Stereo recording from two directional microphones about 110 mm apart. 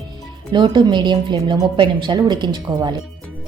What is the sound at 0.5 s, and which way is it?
A woman's voice, 45° right (ahead or behind).